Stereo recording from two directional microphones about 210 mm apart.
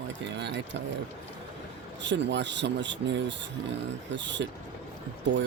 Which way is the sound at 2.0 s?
55° right (ahead or behind).